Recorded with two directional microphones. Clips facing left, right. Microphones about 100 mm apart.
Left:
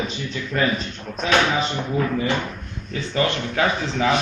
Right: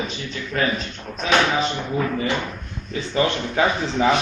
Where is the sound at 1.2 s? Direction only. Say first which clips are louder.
Even; 10° right (ahead or behind).